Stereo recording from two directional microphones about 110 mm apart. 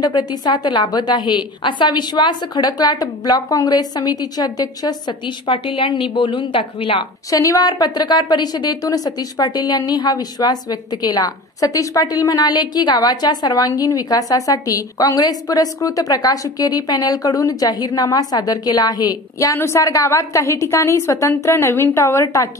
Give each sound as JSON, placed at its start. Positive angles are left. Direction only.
{"t": 0.0, "sound": "a woman's voice", "side_deg": 40}
{"t": 7.2, "sound": "a woman's voice", "side_deg": 30}
{"t": 19.5, "sound": "a woman's voice", "side_deg": 25}